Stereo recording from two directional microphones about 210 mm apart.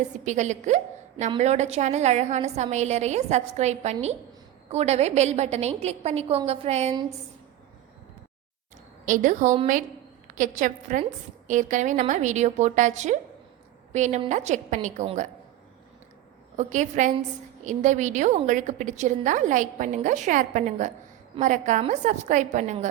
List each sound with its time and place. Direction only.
0.3 s a woman's voice: 35° right (ahead or behind)
9.0 s a woman's voice: 40° right (ahead or behind)
16.6 s a woman's voice: 35° right (ahead or behind)